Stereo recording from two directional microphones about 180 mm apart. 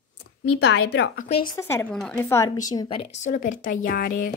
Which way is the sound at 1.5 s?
15° left (ahead or behind).